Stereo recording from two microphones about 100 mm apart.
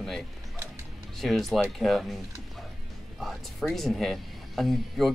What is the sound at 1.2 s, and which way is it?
Speech, centre (ahead or behind).